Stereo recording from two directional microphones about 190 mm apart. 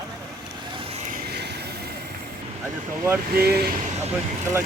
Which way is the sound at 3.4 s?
55° right (ahead or behind).